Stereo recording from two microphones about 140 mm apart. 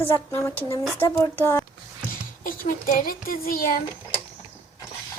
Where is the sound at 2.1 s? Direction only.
80° left.